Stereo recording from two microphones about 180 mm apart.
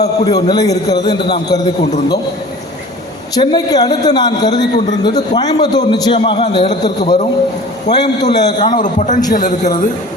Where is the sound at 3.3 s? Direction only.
20° left (ahead or behind).